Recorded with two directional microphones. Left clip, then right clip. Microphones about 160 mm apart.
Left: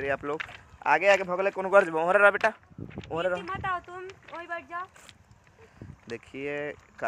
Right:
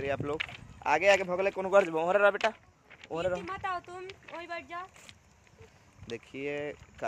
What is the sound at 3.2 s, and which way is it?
Speech, 15° left (ahead or behind).